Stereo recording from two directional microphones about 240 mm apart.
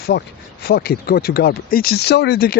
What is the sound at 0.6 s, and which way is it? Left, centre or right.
Speech, left.